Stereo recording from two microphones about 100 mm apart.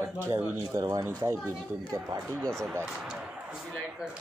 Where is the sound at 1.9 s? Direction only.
40° right (ahead or behind).